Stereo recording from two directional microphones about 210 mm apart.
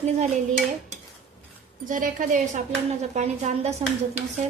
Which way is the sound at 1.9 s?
40° right (ahead or behind).